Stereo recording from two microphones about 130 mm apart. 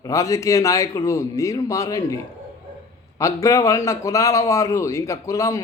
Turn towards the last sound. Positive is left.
turn(degrees=25)  # may be behind; listen again after turning